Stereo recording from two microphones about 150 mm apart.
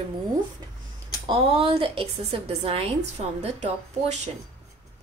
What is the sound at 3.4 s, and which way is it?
Speech, 50° right (ahead or behind).